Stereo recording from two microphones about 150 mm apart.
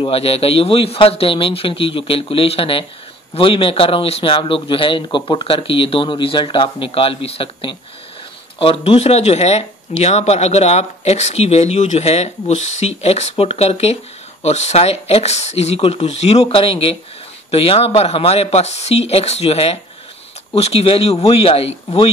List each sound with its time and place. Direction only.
0.0 s a man's voice: 40° left (ahead or behind)